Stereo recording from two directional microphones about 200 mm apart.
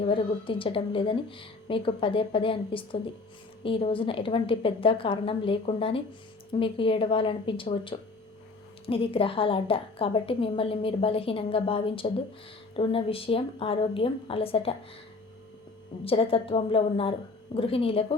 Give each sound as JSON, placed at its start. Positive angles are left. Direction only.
{"t": 0.0, "sound": "a woman's voice", "side_deg": 25}
{"t": 16.0, "sound": "a woman's voice", "side_deg": 30}